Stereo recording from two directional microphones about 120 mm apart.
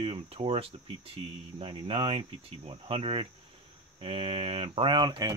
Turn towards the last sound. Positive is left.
turn(degrees=-40)  # may be behind; listen again after turning